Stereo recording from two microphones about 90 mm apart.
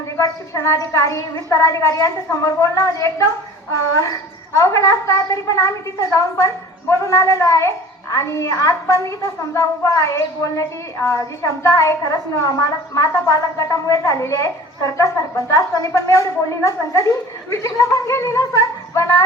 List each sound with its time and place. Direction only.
0.2 s a woman's voice: 35° left (ahead or behind)